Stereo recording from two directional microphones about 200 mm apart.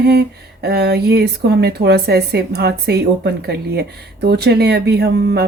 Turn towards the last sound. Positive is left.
turn(degrees=-55)  # may be behind; listen again after turning